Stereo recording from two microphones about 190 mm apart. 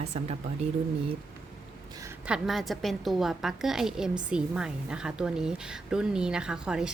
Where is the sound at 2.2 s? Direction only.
Centre (ahead or behind).